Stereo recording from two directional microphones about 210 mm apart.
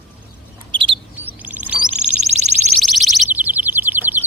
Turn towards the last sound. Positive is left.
turn(degrees=-10)  # may be behind; listen again after turning